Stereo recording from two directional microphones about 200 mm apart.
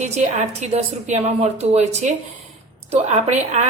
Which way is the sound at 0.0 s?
35° right (ahead or behind).